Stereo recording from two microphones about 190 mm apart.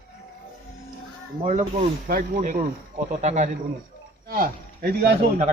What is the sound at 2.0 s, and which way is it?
Speech, 45° right (ahead or behind).